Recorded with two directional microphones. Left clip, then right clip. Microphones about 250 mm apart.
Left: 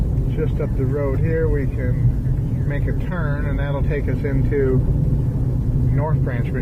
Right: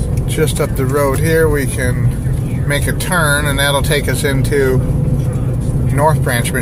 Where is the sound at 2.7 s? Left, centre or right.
Right.